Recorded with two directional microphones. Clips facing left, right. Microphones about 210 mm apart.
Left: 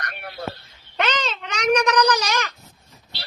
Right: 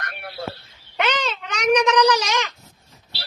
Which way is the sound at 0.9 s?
15° right (ahead or behind).